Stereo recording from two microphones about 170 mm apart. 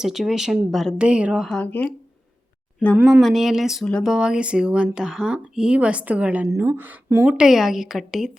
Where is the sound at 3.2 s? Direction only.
Centre (ahead or behind).